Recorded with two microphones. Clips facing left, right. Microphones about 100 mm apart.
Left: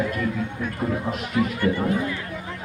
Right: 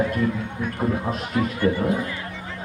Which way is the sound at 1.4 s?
30° right (ahead or behind).